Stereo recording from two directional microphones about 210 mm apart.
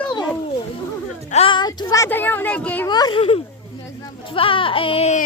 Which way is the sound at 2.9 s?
20° left (ahead or behind).